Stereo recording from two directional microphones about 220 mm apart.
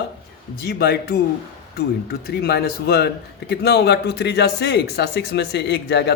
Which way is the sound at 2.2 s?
45° left (ahead or behind).